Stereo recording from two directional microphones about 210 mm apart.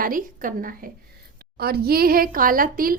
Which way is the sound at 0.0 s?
40° right (ahead or behind).